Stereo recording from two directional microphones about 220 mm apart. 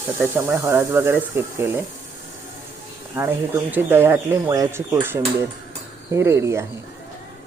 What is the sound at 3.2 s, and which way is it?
Speech, 10° right (ahead or behind).